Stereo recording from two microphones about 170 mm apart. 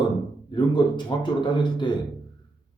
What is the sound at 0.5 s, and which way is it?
A man's voice, 25° left (ahead or behind).